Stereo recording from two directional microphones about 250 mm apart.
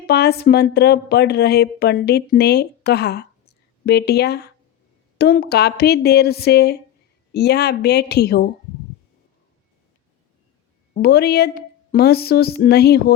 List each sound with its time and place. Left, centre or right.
0.1 s speech: left
10.9 s speech: left